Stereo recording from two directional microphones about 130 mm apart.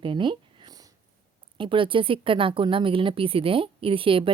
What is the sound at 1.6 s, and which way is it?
A woman's voice, 40° right (ahead or behind).